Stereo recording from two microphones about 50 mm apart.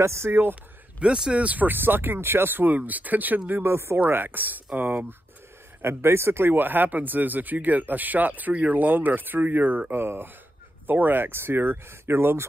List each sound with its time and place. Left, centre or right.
0.0 s speech: right
0.3 s speech: right
0.9 s speech: centre
1.4 s speech: right
3.6 s speech: right
4.1 s speech: right
5.8 s speech: right